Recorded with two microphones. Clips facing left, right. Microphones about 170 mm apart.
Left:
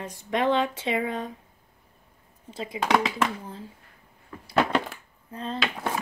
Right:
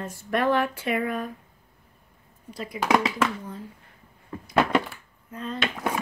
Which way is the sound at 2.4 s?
25° left (ahead or behind).